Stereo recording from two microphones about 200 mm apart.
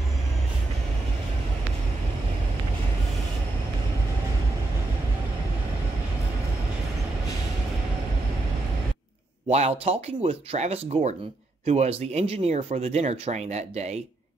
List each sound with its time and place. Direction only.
9.5 s speech: 30° right (ahead or behind)